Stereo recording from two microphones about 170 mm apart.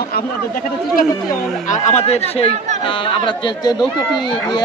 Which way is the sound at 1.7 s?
40° left (ahead or behind).